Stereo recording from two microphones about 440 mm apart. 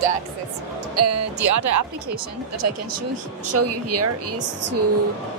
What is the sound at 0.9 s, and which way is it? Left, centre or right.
Speech, right.